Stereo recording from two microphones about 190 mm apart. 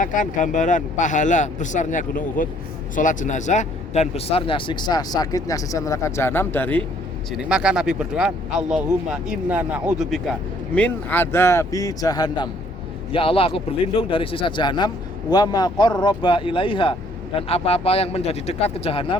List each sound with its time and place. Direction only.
0.0 s speech: 45° left (ahead or behind); by 6.8 s 10° left (ahead or behind)
7.3 s a man's voice: 5° right (ahead or behind); by 19.1 s 30° left (ahead or behind)